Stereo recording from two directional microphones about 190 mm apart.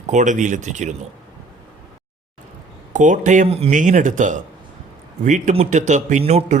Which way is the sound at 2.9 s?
40° right (ahead or behind).